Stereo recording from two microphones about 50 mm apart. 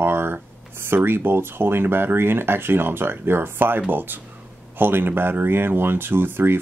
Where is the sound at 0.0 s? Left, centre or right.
Right.